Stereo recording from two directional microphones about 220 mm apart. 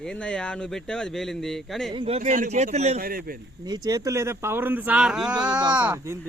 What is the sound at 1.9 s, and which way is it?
A man's voice, 25° right (ahead or behind).